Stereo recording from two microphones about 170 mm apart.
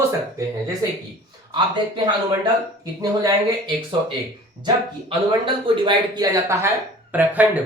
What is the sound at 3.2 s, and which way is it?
A man's voice, 25° right (ahead or behind).